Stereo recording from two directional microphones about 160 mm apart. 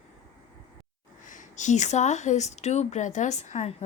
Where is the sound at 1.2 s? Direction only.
50° left (ahead or behind).